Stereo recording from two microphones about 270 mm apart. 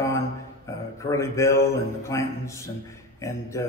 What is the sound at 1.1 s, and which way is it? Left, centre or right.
Speech, centre.